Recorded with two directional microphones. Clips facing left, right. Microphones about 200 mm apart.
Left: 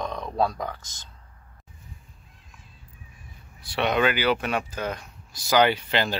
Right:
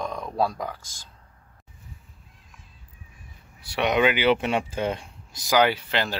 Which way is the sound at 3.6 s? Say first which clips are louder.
Right 1 dB; 10° right (ahead or behind).